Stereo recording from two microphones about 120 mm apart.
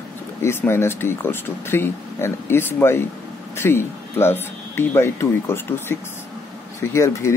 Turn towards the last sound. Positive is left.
turn(degrees=20)  # may be behind; listen again after turning